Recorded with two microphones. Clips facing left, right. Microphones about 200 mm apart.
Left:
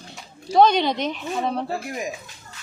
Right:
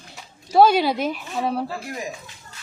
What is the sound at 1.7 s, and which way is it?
Speech, 20° left (ahead or behind).